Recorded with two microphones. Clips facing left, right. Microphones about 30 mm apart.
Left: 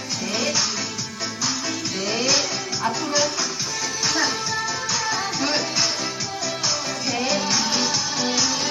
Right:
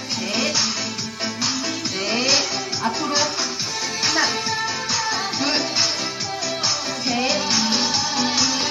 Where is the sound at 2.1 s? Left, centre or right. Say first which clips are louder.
Right 2 dB; centre.